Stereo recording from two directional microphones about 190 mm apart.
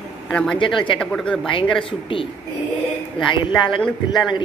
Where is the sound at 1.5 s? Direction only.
25° left (ahead or behind).